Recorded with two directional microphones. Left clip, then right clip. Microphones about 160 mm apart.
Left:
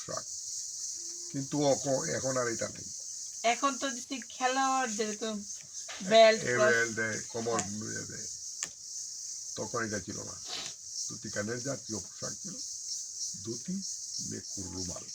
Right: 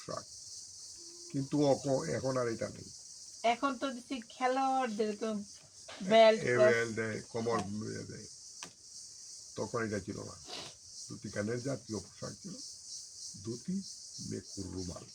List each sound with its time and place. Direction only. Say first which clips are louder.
1.3 s speech: left 1 dB; centre (ahead or behind)
3.4 s speech: left 2 dB; 20° right (ahead or behind)
6.7 s speech: left 2 dB; 5° right (ahead or behind)
9.6 s speech: left 1 dB; 5° right (ahead or behind)
11.3 s speech: left 1 dB; 5° right (ahead or behind)